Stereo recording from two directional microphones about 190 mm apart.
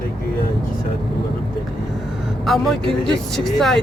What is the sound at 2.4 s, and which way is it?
Speech, centre (ahead or behind).